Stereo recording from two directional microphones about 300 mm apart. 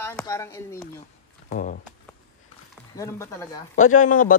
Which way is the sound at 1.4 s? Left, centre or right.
Left.